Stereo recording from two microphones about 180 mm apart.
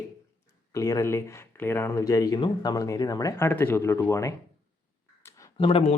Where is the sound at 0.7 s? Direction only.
20° left (ahead or behind).